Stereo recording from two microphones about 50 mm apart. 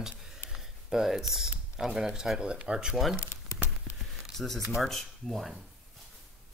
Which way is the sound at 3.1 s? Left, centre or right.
Left.